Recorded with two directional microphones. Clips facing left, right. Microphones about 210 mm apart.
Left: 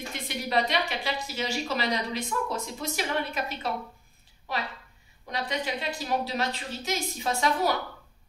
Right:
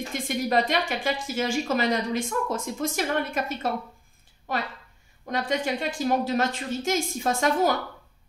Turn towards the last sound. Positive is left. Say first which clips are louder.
# right 3 dB
turn(degrees=-50)  # may be behind; listen again after turning